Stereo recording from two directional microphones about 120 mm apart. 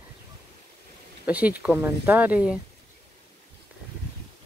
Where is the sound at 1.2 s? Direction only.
10° right (ahead or behind).